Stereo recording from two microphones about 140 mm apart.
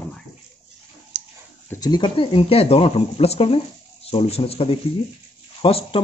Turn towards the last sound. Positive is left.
turn(degrees=40)  # may be behind; listen again after turning